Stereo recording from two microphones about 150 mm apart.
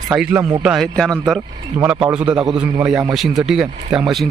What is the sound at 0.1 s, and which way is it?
A man's voice, 10° right (ahead or behind).